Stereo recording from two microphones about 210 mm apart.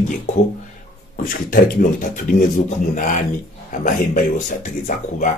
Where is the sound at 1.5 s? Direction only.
40° left (ahead or behind).